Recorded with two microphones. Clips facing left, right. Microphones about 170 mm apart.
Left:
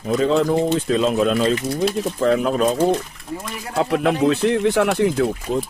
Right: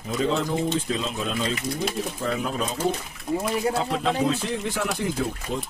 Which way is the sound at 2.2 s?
80° left.